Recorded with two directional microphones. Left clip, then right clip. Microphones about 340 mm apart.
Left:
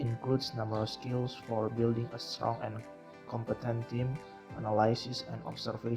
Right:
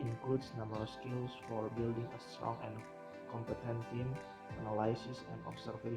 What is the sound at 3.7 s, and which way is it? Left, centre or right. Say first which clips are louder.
Speech: left 6 dB; left.